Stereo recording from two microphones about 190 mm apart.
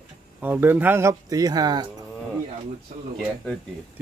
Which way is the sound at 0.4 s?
10° right (ahead or behind).